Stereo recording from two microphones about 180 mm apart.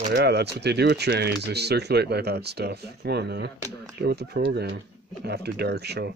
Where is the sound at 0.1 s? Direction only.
65° right (ahead or behind).